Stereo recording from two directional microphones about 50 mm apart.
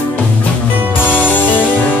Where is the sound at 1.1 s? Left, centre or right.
Left.